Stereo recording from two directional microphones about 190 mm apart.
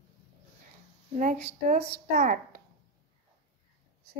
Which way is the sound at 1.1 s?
45° right (ahead or behind).